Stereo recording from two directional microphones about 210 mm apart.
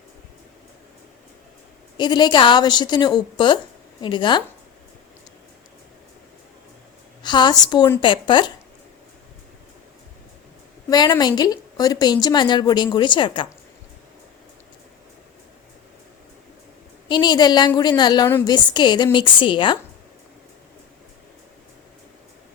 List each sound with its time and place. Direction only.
2.0 s a woman's voice: 20° left (ahead or behind)
7.2 s a woman's voice: 20° left (ahead or behind)
10.8 s a woman's voice: 20° left (ahead or behind)
17.1 s a woman's voice: 20° left (ahead or behind)